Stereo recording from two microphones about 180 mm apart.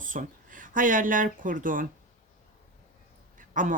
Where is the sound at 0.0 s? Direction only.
45° right (ahead or behind).